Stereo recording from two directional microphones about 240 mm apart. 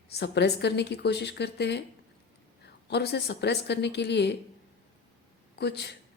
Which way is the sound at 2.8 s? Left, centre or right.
Left.